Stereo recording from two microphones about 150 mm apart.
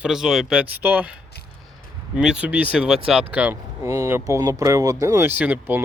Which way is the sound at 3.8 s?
20° right (ahead or behind).